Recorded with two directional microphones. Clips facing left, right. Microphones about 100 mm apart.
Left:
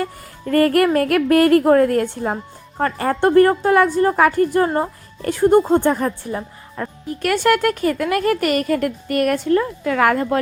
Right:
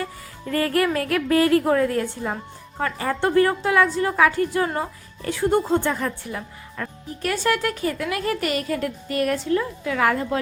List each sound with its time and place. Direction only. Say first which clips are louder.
0.0 s music: left 5 dB; 50° left (ahead or behind)
0.9 s a woman's voice: left 5 dB; 60° left (ahead or behind); by 6.9 s 30° left (ahead or behind)
7.1 s speech: left 6 dB; 70° left (ahead or behind)